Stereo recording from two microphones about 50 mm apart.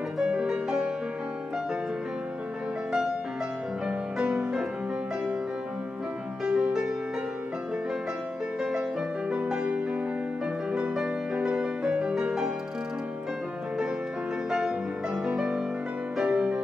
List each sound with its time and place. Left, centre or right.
0.2 s music: centre
3.8 s music: centre
6.4 s music: centre
9.3 s music: right
15.2 s music: centre